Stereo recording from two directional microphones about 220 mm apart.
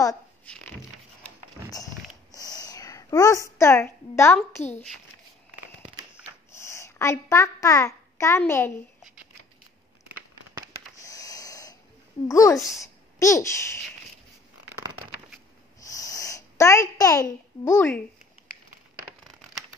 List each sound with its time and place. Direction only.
1.7 s a sound: 15° left (ahead or behind)
3.5 s a woman's voice: 15° left (ahead or behind)
6.5 s babbling: 15° left (ahead or behind)
8.4 s a woman's voice: 10° left (ahead or behind)
11.0 s a sound: 15° left (ahead or behind)
12.3 s a woman's voice: 15° left (ahead or behind)
15.8 s sniff: 15° left (ahead or behind)
17.0 s a woman's voice: 15° left (ahead or behind)